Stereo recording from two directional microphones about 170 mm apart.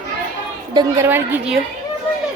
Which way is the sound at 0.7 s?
15° right (ahead or behind).